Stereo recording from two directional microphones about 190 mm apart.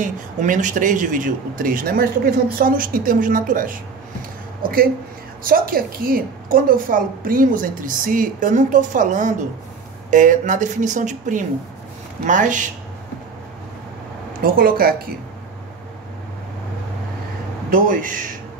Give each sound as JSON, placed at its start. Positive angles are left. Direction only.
{"t": 0.0, "sound": "a woman's voice", "side_deg": -40}
{"t": 14.4, "sound": "a woman's voice", "side_deg": -50}
{"t": 17.6, "sound": "a woman's voice", "side_deg": -45}